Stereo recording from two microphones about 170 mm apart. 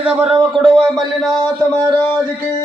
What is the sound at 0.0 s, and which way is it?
Speech, 10° right (ahead or behind).